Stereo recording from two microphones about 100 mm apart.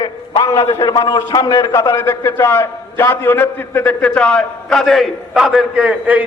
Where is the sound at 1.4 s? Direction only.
35° left (ahead or behind).